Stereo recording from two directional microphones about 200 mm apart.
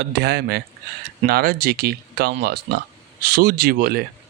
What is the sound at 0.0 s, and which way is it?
Speech, 55° right (ahead or behind).